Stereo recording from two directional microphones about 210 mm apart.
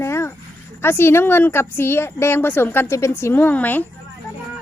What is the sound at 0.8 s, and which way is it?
A woman's voice, 10° left (ahead or behind).